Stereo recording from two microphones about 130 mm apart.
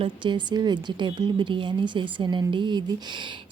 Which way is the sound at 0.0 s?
40° right (ahead or behind).